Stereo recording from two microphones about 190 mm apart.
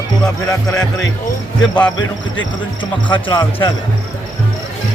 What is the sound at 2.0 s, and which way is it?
Speech, 80° left.